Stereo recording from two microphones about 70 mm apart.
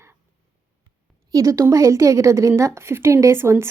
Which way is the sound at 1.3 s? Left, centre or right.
Right.